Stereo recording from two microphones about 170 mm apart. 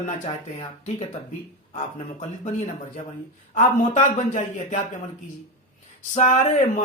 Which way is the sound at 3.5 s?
50° left (ahead or behind).